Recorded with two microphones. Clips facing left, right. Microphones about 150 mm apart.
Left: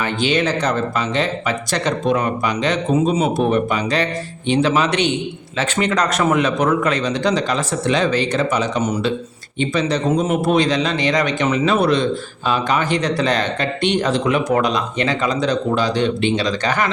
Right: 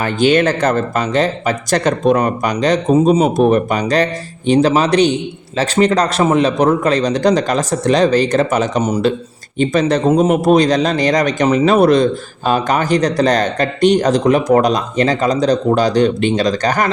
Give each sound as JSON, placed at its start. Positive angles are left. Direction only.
{"t": 0.0, "sound": "speech", "side_deg": -45}